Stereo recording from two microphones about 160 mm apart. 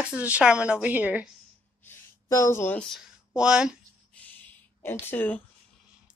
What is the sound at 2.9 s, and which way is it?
Speech, 5° right (ahead or behind).